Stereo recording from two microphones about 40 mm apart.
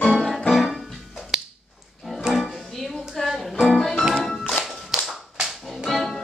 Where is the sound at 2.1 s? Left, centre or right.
Centre.